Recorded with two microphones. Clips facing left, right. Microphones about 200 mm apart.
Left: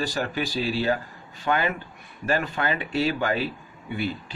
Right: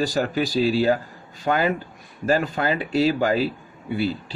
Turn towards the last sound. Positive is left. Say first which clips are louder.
# right 5 dB
turn(degrees=-35)  # may be behind; listen again after turning